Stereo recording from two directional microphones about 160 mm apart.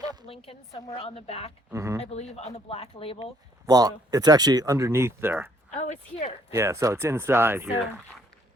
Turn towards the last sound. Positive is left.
turn(degrees=-15)  # may be behind; listen again after turning